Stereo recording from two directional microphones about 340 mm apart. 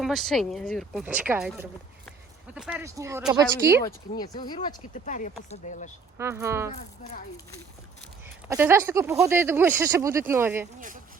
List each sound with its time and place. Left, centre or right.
0.0 s speech: centre
4.2 s speech: centre
6.1 s speech: centre
6.7 s speech: left
8.4 s speech: centre